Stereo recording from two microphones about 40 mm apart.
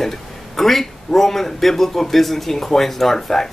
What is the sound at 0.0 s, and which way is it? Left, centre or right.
Speech, centre.